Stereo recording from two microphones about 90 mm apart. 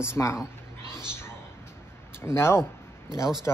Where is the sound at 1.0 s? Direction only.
30° left (ahead or behind).